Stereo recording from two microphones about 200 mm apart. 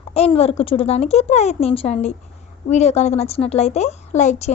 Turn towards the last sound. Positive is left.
turn(degrees=35)  # may be behind; listen again after turning